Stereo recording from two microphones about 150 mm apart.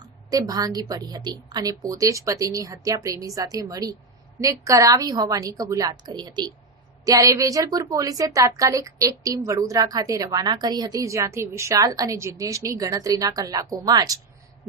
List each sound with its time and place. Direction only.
0.3 s a woman's voice: 25° right (ahead or behind)